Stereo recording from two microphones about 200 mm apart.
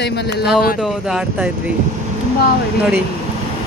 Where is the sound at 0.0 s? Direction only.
55° left (ahead or behind).